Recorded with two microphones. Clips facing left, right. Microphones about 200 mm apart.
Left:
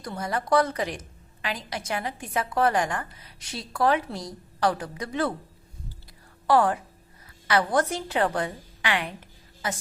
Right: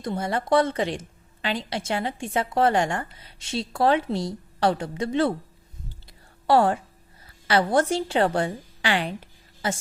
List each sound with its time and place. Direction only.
0.0 s a woman's voice: 25° right (ahead or behind)
6.5 s a woman's voice: 25° right (ahead or behind)